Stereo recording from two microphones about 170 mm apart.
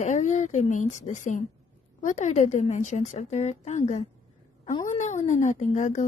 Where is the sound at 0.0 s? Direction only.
45° left (ahead or behind).